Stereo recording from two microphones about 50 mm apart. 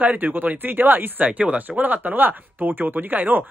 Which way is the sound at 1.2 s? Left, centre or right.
Right.